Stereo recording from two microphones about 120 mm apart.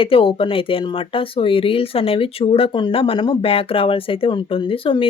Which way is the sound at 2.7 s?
40° left (ahead or behind).